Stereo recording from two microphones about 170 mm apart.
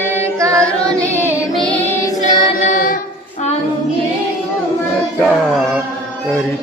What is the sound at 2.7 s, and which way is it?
A capella, 55° left (ahead or behind).